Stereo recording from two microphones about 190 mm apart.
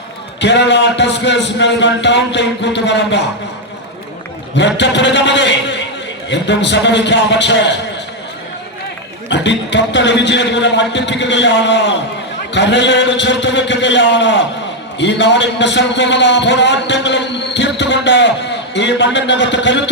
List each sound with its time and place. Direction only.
0.3 s a man's voice: 65° left (ahead or behind)
4.5 s a man's voice: 70° left (ahead or behind)
9.3 s a man's voice: 70° left (ahead or behind)